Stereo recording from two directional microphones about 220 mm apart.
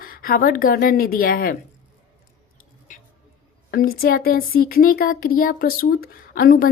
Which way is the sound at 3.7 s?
45° left (ahead or behind).